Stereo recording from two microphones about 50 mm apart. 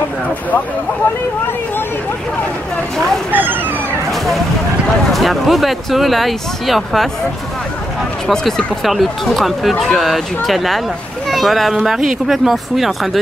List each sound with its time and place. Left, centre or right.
3.3 s speech: right
5.1 s speech: centre
8.3 s speech: centre